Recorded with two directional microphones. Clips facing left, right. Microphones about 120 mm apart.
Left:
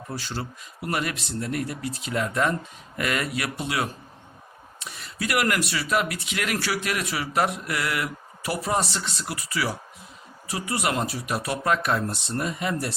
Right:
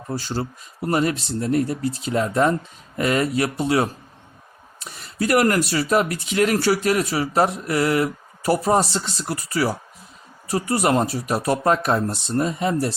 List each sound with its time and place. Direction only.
0.1 s speech: 35° right (ahead or behind)